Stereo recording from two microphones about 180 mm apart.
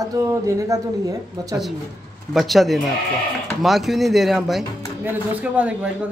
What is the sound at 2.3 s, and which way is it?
A man's voice, centre (ahead or behind).